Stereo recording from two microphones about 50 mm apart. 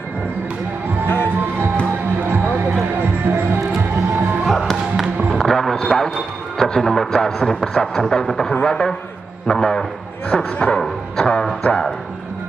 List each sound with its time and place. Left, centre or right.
1.0 s music: left
3.3 s music: right
4.5 s music: centre
8.3 s speech: centre
11.1 s music: centre